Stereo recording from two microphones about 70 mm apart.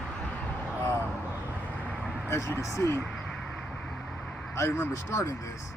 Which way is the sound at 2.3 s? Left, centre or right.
Left.